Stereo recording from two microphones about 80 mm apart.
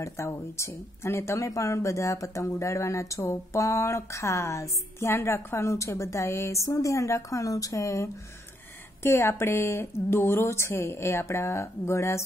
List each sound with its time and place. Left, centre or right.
0.0 s speech: left
9.0 s speech: left